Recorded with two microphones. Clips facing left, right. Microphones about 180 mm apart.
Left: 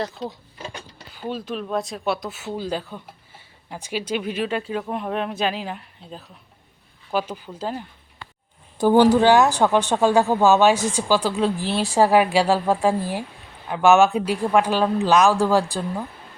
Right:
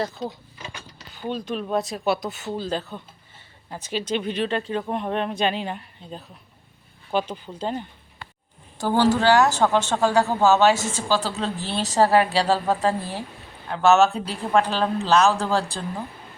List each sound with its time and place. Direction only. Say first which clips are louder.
0.0 s speech: even; 5° right (ahead or behind)
8.8 s a woman's voice: left 5 dB; 15° left (ahead or behind)